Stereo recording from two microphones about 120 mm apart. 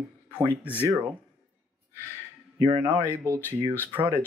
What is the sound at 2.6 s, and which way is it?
Speech, 50° right (ahead or behind).